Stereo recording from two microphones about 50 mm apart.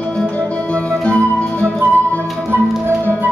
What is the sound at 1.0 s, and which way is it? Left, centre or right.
Music, left.